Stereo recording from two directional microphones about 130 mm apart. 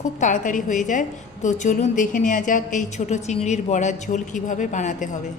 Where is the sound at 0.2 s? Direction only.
80° left.